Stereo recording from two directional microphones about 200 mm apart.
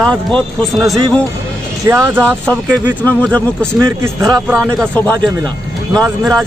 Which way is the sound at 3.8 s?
15° right (ahead or behind).